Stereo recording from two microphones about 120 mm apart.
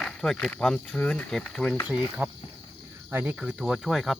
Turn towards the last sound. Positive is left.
turn(degrees=0)  # may be behind; listen again after turning